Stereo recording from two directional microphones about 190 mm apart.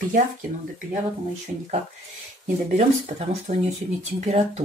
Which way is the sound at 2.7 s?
35° right (ahead or behind).